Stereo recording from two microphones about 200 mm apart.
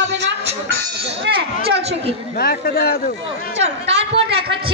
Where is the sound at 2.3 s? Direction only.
50° left (ahead or behind).